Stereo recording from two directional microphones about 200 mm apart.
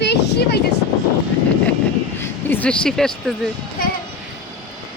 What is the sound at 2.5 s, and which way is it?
Speech, 5° left (ahead or behind).